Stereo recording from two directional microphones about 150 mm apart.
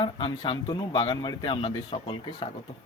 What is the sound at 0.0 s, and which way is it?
Speech, 35° left (ahead or behind).